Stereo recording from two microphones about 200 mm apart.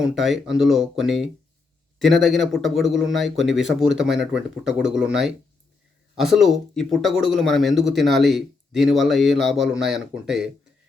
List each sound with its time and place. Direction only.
0.0 s speech: centre (ahead or behind)